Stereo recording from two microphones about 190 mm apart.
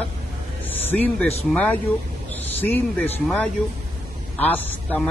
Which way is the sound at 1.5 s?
10° left (ahead or behind).